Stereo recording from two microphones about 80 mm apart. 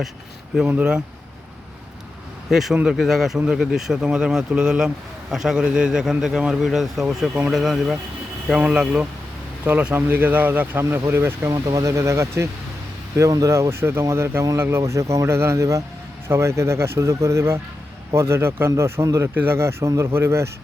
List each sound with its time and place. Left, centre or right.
2.5 s a man's voice: centre; by 19.3 s right
19.3 s speech: right
19.5 s speech: right